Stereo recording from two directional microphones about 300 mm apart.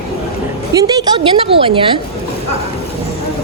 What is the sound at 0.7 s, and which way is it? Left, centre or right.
A woman's voice, centre.